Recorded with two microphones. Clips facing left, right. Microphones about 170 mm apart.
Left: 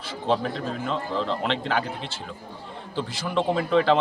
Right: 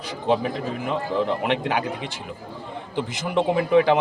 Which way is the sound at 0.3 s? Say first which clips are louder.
Right 2 dB; 15° right (ahead or behind).